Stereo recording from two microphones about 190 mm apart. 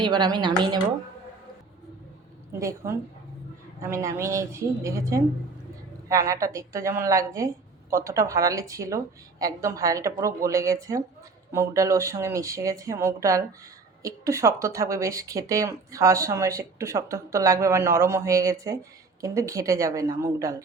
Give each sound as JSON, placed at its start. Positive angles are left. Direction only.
{"t": 0.0, "sound": "a woman's voice", "side_deg": -25}
{"t": 2.5, "sound": "a woman's voice", "side_deg": -15}